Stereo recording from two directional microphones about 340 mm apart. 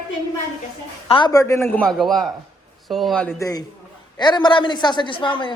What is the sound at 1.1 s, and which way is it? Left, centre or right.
A man's voice, centre.